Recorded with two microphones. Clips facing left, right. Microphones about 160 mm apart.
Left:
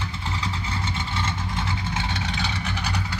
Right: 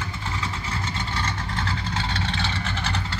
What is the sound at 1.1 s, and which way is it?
Vehicle, 20° left (ahead or behind).